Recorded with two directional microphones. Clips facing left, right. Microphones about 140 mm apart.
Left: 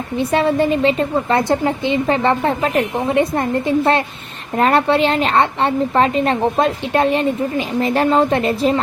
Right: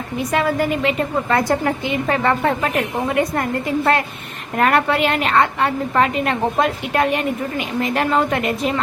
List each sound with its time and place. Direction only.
0.2 s a woman's voice: 30° left (ahead or behind)